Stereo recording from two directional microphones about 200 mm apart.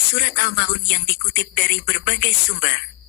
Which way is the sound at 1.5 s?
55° left (ahead or behind).